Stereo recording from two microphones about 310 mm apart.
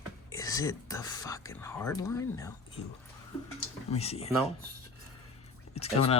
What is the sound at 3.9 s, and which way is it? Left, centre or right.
Speech, centre.